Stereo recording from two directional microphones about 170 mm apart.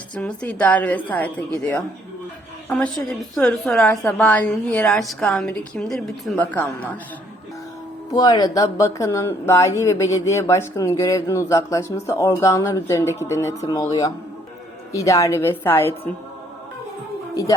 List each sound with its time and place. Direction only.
0.2 s a woman's voice: 10° left (ahead or behind)
8.1 s speech: 20° left (ahead or behind)